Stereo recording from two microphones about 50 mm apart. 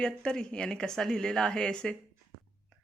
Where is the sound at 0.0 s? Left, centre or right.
Centre.